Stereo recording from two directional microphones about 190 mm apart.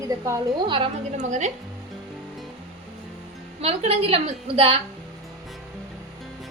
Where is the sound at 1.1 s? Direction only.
40° right (ahead or behind).